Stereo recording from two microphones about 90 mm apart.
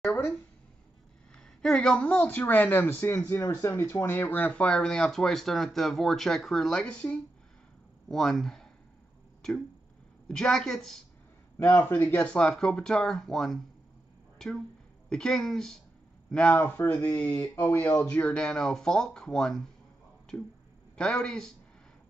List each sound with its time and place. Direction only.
1.3 s speech: 5° left (ahead or behind)
10.2 s speech: 5° left (ahead or behind)
11.7 s speech: 20° left (ahead or behind)
12.3 s speech: 10° left (ahead or behind)
18.1 s speech: 10° left (ahead or behind)
20.3 s speech: 15° left (ahead or behind)